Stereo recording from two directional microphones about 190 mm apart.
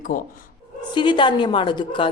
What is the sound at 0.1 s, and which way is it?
Speech, 45° left (ahead or behind).